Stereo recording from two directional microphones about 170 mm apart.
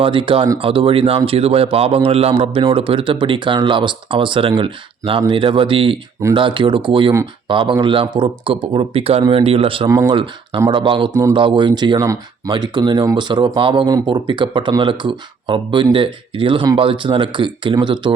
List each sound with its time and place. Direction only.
0.0 s speech: 30° right (ahead or behind)
9.9 s speech: 20° right (ahead or behind)
11.1 s speech: 15° right (ahead or behind)
11.3 s speech: 30° right (ahead or behind)